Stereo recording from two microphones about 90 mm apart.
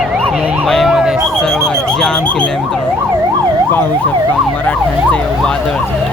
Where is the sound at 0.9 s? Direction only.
5° right (ahead or behind).